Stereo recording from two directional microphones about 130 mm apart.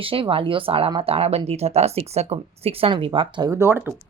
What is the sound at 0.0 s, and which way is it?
Speech, 45° right (ahead or behind).